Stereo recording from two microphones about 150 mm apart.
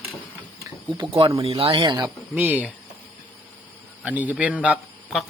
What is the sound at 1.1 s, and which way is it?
Speech, 35° right (ahead or behind).